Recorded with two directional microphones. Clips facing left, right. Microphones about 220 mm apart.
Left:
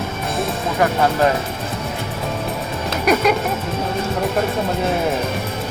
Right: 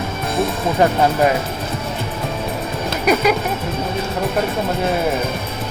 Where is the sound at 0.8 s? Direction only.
25° right (ahead or behind).